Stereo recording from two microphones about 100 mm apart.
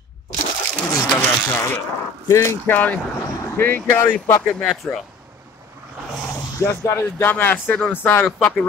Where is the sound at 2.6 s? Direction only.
15° left (ahead or behind).